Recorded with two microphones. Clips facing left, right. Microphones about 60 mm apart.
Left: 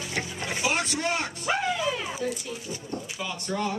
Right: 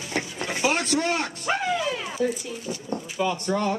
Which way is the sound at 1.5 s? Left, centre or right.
Centre.